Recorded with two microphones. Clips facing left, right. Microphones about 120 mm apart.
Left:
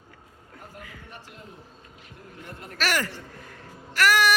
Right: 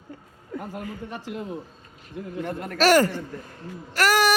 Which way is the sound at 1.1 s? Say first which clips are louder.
Right 12 dB; 90° right.